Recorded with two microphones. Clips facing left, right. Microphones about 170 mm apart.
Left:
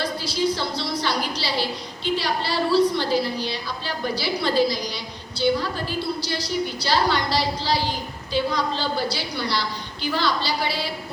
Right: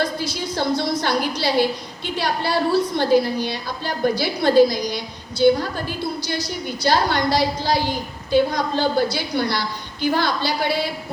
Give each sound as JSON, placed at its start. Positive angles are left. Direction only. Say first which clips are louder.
{"t": 0.0, "sound": "a woman's voice", "louder": "even", "side_deg": -50}
{"t": 6.8, "sound": "a woman's voice", "louder": "right 5 dB", "side_deg": -50}